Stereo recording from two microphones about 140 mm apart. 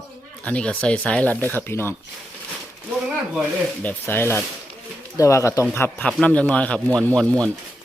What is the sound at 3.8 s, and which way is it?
Speech, 15° left (ahead or behind).